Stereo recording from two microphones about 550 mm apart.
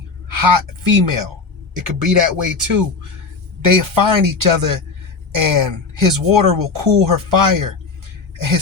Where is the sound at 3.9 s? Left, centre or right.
Right.